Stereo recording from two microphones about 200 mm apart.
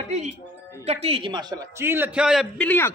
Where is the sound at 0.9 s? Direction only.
30° right (ahead or behind).